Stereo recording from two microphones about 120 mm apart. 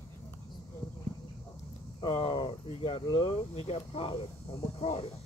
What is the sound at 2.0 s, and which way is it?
Speech, 40° left (ahead or behind).